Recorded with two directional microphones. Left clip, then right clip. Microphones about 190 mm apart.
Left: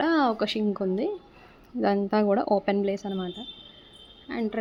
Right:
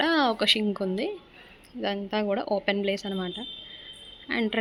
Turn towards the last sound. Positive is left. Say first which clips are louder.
# right 3 dB
turn(degrees=0)  # may be behind; listen again after turning